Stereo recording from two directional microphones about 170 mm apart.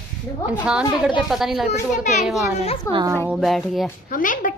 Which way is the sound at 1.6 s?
40° left (ahead or behind).